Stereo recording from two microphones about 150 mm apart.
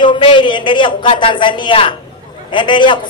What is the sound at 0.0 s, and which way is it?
A man's voice, 35° left (ahead or behind).